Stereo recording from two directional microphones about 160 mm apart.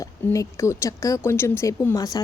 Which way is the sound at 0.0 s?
20° left (ahead or behind).